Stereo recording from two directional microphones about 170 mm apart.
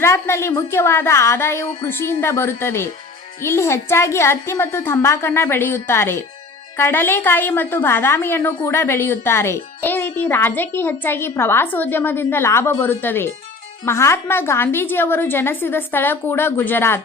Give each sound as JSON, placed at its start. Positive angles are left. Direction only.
{"t": 0.0, "sound": "a woman's voice", "side_deg": 15}